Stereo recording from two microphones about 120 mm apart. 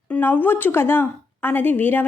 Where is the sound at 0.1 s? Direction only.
15° left (ahead or behind).